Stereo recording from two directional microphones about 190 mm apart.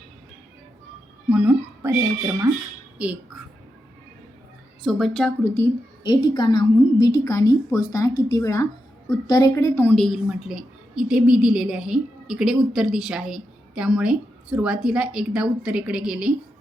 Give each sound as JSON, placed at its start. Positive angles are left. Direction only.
{"t": 1.3, "sound": "speech", "side_deg": -5}
{"t": 3.0, "sound": "music", "side_deg": -5}
{"t": 4.8, "sound": "a woman's voice", "side_deg": 0}
{"t": 6.0, "sound": "a woman's voice", "side_deg": 20}